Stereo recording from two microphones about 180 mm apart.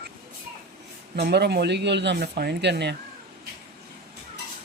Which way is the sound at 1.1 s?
65° right (ahead or behind).